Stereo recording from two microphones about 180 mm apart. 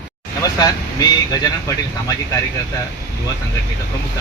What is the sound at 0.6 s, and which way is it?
Speech, 20° left (ahead or behind).